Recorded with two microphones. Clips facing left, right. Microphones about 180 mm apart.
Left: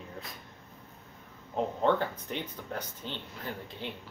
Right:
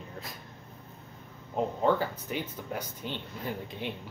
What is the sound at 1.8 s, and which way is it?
Speech, 5° right (ahead or behind).